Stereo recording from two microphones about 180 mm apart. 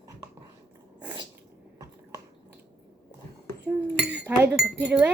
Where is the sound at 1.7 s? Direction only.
15° right (ahead or behind).